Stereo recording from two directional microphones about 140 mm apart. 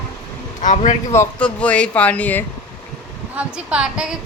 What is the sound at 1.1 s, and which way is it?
Speech, 20° left (ahead or behind).